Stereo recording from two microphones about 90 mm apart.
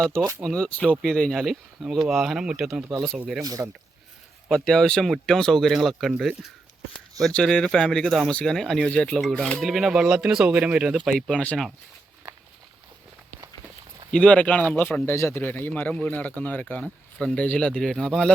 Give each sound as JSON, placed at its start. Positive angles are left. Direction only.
{"t": 0.0, "sound": "speech", "side_deg": 10}
{"t": 3.4, "sound": "speech", "side_deg": -40}
{"t": 4.4, "sound": "speech", "side_deg": 5}
{"t": 8.9, "sound": "speech", "side_deg": 15}
{"t": 9.6, "sound": "speech", "side_deg": 0}
{"t": 11.3, "sound": "speech", "side_deg": 10}
{"t": 14.1, "sound": "a man's voice", "side_deg": 10}